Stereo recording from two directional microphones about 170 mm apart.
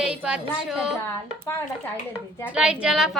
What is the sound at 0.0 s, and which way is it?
Speech, 5° right (ahead or behind).